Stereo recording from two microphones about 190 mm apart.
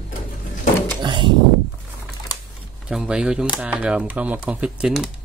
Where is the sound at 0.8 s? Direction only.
25° right (ahead or behind).